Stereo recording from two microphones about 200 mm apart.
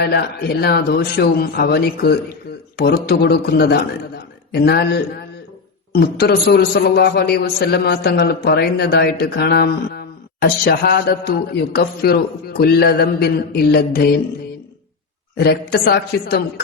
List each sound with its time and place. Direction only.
0.0 s a man's voice: 55° left (ahead or behind)
15.4 s a man's voice: 55° left (ahead or behind)